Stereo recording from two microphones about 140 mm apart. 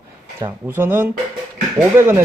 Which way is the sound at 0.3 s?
15° right (ahead or behind).